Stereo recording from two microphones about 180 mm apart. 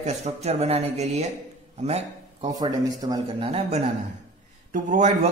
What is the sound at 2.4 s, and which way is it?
A man's voice, 20° right (ahead or behind).